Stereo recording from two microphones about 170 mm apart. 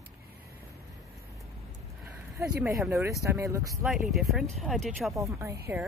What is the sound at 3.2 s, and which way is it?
Speech, 20° right (ahead or behind).